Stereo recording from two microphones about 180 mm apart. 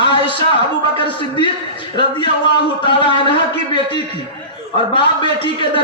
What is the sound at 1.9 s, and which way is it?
A man's voice, 25° left (ahead or behind).